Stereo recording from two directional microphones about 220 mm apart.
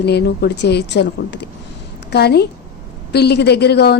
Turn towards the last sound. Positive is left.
turn(degrees=50)  # may be behind; listen again after turning